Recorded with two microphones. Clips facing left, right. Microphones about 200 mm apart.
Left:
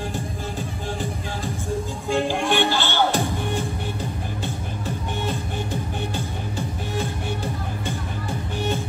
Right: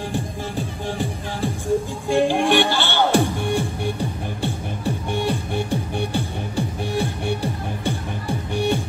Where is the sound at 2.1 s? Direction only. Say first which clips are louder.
Right 4 dB; 15° right (ahead or behind).